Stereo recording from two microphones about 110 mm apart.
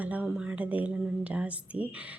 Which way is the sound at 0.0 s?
15° right (ahead or behind).